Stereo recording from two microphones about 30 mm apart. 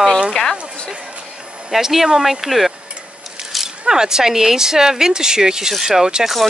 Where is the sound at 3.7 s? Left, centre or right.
Right.